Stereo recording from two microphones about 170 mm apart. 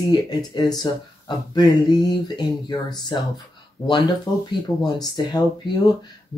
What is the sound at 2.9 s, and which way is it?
Speech, 25° left (ahead or behind).